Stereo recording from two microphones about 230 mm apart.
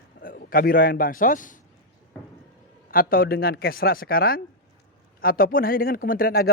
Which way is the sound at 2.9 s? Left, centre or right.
Left.